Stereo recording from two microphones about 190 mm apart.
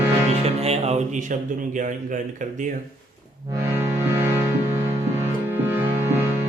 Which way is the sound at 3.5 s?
10° right (ahead or behind).